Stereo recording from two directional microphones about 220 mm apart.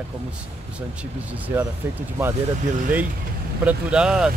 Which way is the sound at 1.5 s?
10° right (ahead or behind).